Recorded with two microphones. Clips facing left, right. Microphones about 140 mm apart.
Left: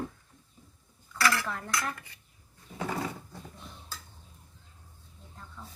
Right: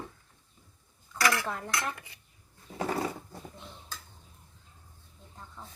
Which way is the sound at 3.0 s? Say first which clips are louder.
Right 2 dB; 25° right (ahead or behind).